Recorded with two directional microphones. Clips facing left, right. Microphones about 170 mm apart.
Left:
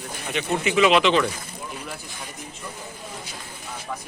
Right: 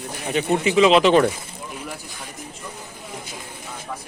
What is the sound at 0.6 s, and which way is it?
Speech, 30° right (ahead or behind).